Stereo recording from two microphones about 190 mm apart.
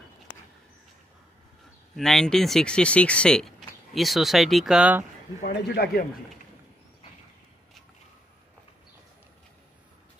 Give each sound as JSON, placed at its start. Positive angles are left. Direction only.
{"t": 2.0, "sound": "speech", "side_deg": 0}
{"t": 5.4, "sound": "a man's voice", "side_deg": 55}